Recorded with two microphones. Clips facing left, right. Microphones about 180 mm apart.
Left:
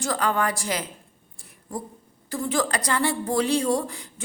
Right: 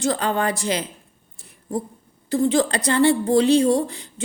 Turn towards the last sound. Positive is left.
turn(degrees=-25)  # may be behind; listen again after turning